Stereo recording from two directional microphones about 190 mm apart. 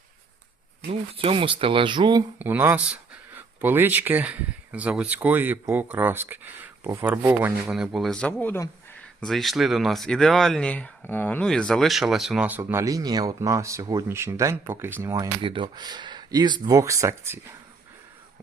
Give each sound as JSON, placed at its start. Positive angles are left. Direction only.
{"t": 1.1, "sound": "speech", "side_deg": -30}
{"t": 2.4, "sound": "speech", "side_deg": -10}